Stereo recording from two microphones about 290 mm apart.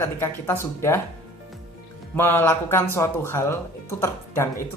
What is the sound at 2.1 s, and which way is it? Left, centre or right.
Speech, centre.